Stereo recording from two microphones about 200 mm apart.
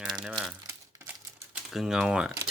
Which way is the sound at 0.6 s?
10° right (ahead or behind).